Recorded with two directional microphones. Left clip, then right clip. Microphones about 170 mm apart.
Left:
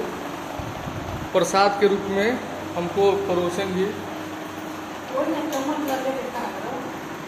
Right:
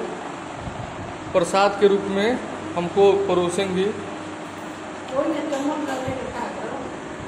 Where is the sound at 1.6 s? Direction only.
15° right (ahead or behind).